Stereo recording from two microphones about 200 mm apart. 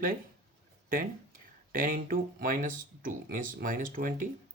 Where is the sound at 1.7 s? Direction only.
45° right (ahead or behind).